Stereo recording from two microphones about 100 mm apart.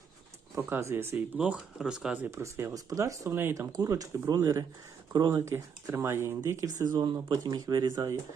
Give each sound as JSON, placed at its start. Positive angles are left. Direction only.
{"t": 0.6, "sound": "speech", "side_deg": -25}
{"t": 1.4, "sound": "speech", "side_deg": -10}
{"t": 2.3, "sound": "speech", "side_deg": -25}
{"t": 3.7, "sound": "speech", "side_deg": -35}
{"t": 6.9, "sound": "speech", "side_deg": -50}